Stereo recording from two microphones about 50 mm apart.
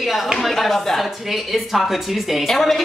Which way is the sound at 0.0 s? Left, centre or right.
Centre.